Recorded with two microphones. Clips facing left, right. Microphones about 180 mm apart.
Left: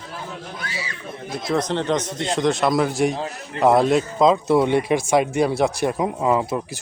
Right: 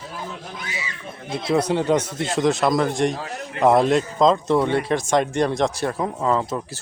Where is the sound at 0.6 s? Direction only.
20° right (ahead or behind).